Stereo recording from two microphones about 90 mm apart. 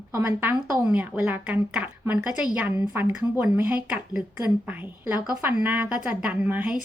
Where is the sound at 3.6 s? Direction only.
10° right (ahead or behind).